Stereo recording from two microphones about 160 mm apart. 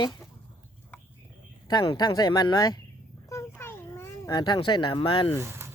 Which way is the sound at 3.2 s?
15° left (ahead or behind).